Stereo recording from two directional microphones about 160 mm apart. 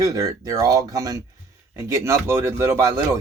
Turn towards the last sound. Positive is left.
turn(degrees=-20)  # may be behind; listen again after turning